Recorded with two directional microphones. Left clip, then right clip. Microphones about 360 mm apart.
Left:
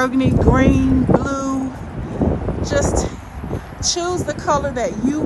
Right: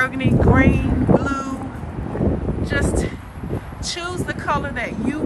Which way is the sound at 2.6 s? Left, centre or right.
Centre.